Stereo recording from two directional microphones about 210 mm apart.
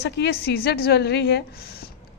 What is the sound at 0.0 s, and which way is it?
A woman's voice, 55° left (ahead or behind).